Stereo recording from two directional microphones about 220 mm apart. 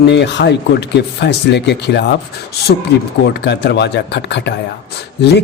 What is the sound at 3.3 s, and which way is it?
A woman's voice, 50° left (ahead or behind).